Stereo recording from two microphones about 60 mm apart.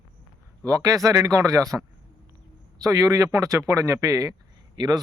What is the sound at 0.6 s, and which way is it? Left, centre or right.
A man's voice, right.